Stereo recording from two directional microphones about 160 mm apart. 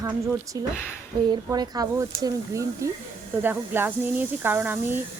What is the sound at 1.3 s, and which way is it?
Speech, 25° right (ahead or behind).